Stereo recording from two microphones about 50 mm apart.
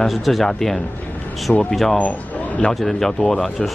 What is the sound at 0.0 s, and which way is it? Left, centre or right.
Speech, centre.